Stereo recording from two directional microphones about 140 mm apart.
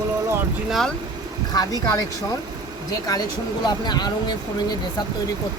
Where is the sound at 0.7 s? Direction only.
Centre (ahead or behind).